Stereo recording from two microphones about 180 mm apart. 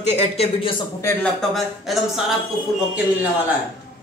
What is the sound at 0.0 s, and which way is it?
Speech, 40° left (ahead or behind).